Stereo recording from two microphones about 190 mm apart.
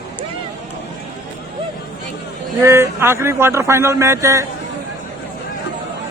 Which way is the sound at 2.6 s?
15° right (ahead or behind).